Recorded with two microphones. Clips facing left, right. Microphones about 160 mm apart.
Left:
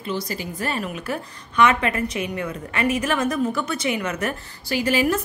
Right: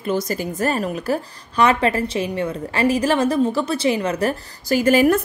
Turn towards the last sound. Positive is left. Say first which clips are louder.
# right 6 dB
turn(degrees=-50)  # may be behind; listen again after turning